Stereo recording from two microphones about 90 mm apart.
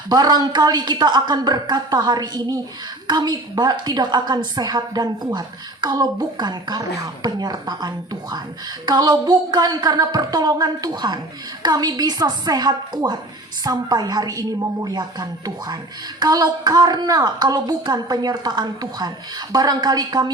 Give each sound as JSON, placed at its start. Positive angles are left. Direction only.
{"t": 0.1, "sound": "a woman's voice", "side_deg": -50}